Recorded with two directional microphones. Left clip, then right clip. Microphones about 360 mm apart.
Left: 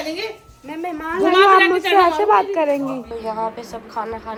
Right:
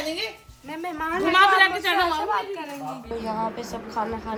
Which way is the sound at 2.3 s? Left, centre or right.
Left.